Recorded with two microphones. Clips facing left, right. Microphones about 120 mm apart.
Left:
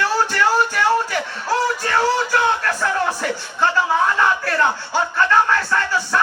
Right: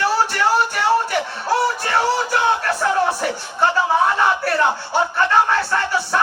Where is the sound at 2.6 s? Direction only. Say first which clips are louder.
Right 2 dB; 25° right (ahead or behind).